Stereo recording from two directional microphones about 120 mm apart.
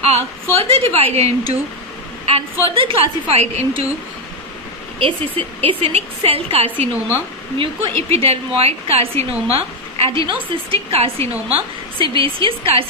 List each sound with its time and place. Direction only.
0.0 s a woman's voice: 55° right (ahead or behind)
2.7 s a woman's voice: 45° right (ahead or behind)
4.9 s a woman's voice: 50° right (ahead or behind)
11.5 s a woman's voice: 45° right (ahead or behind)